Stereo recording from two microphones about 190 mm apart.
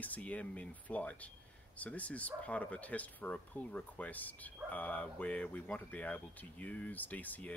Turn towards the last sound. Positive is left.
turn(degrees=10)  # may be behind; listen again after turning